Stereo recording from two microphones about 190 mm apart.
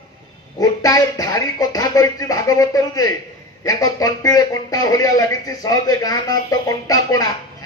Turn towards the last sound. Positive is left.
turn(degrees=20)  # may be behind; listen again after turning